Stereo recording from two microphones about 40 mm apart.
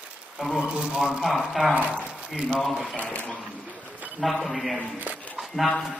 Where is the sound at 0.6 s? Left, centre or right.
Right.